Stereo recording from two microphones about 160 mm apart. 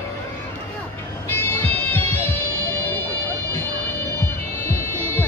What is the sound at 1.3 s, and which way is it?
Music, 15° left (ahead or behind).